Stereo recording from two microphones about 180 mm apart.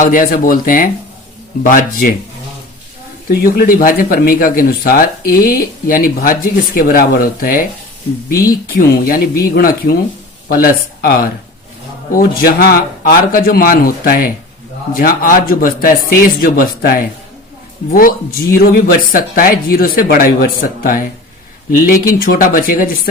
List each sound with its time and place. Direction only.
0.0 s speech: 50° left (ahead or behind)
3.2 s speech: 55° left (ahead or behind)
22.2 s speech: 55° left (ahead or behind)